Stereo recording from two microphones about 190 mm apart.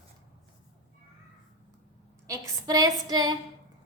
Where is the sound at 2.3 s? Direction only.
20° right (ahead or behind).